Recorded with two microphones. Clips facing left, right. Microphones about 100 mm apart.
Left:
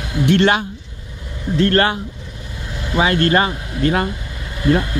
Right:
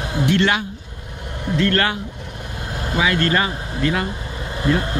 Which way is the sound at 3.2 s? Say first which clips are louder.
Left 4 dB; 40° left (ahead or behind).